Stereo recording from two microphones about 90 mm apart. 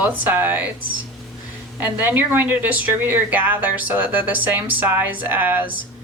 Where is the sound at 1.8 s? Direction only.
20° right (ahead or behind).